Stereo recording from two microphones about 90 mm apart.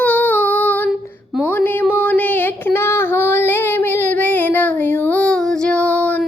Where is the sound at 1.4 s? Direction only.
20° left (ahead or behind).